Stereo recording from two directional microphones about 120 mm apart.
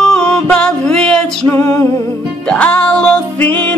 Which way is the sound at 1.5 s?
25° left (ahead or behind).